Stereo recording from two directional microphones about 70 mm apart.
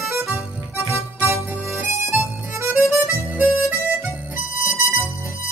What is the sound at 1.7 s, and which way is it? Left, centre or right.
Harmonica, right.